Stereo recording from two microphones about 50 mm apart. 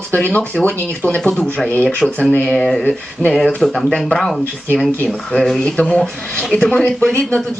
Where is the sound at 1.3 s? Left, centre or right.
Centre.